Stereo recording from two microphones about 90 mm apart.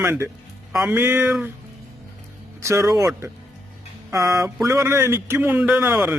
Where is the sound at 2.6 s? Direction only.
35° right (ahead or behind); by 5.9 s 15° right (ahead or behind).